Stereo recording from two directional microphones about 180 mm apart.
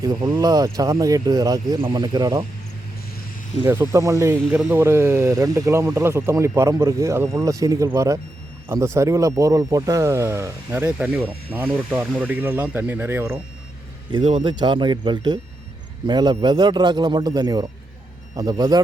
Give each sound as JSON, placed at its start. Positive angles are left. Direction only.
{"t": 0.0, "sound": "speech", "side_deg": -20}
{"t": 3.7, "sound": "speech", "side_deg": -15}
{"t": 14.1, "sound": "speech", "side_deg": -25}